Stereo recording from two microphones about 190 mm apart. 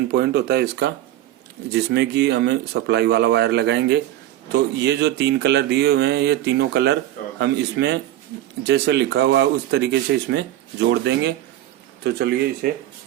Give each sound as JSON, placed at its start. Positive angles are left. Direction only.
{"t": 0.1, "sound": "speech", "side_deg": -60}